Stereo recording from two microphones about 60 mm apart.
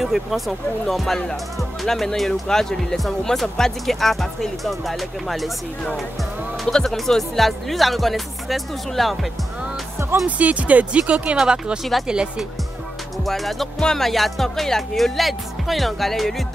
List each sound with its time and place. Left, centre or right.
0.0 s speech: centre
6.6 s speech: centre
10.2 s speech: right
13.2 s speech: centre